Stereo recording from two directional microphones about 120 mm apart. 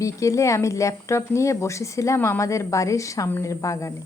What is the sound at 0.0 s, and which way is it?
Speech, 25° left (ahead or behind).